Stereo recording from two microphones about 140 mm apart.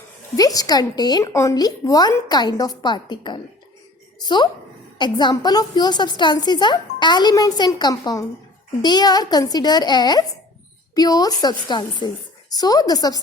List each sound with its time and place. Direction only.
0.3 s a woman's voice: 25° left (ahead or behind)